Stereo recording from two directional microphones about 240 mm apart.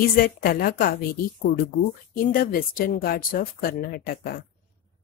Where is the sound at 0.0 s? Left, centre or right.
Left.